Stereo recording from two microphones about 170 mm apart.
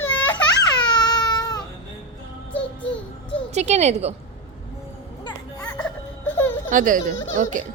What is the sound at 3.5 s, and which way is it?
Speech, 40° right (ahead or behind).